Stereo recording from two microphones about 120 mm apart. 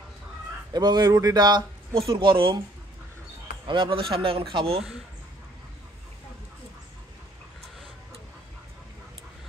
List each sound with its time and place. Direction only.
0.7 s speech: 35° right (ahead or behind)
3.6 s speech: 45° right (ahead or behind)